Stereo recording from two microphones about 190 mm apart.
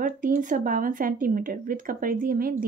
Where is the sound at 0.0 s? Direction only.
45° right (ahead or behind).